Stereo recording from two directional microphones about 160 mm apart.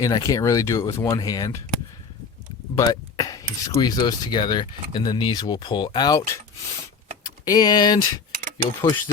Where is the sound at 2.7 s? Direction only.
20° left (ahead or behind).